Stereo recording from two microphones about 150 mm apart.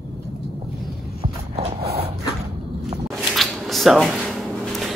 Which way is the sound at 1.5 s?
45° right (ahead or behind).